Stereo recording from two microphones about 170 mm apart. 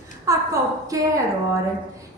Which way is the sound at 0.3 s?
20° right (ahead or behind).